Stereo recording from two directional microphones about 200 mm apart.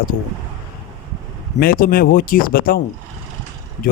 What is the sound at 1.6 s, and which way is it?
Speech, 45° left (ahead or behind).